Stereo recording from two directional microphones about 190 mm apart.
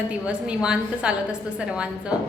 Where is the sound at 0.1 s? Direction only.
5° right (ahead or behind).